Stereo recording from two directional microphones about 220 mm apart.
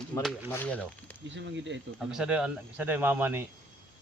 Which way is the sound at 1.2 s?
55° right (ahead or behind).